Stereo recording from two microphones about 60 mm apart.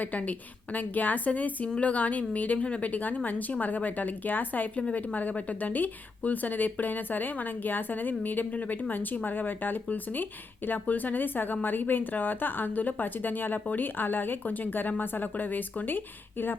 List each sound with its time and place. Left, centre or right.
0.0 s a woman's voice: left